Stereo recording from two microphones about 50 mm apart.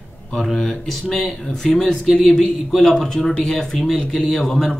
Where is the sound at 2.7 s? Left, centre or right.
Centre.